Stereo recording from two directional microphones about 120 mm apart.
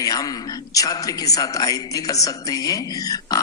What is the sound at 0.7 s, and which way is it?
A woman's voice, 30° left (ahead or behind).